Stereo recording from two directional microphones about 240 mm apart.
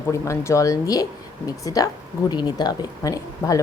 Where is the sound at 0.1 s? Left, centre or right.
Centre.